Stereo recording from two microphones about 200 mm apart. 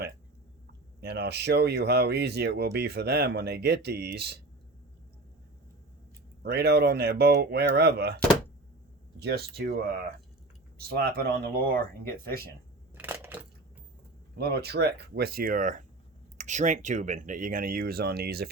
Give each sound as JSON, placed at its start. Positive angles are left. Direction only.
{"t": 1.0, "sound": "speech", "side_deg": -55}
{"t": 6.4, "sound": "speech", "side_deg": -55}
{"t": 13.0, "sound": "crushing", "side_deg": -10}
{"t": 14.3, "sound": "speech", "side_deg": -55}